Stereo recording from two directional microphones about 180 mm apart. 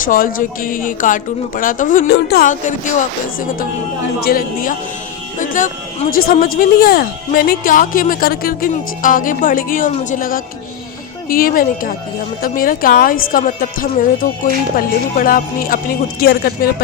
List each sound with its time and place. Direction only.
0.0 s speech: 50° left (ahead or behind)
4.3 s speech: 50° left (ahead or behind)